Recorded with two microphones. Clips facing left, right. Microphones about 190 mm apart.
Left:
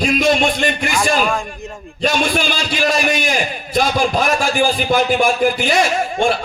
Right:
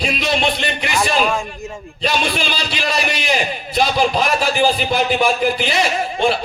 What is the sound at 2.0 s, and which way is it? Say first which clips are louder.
A man's voice: left 3 dB; 50° left (ahead or behind).